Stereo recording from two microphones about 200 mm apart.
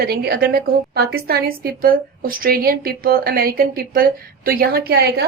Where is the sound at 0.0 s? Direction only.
50° right (ahead or behind).